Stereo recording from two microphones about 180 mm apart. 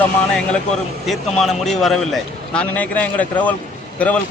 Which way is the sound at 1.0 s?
Centre (ahead or behind).